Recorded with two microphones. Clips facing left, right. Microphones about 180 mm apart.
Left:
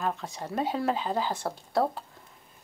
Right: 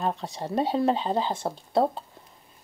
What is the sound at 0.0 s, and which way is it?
Speech, 30° right (ahead or behind).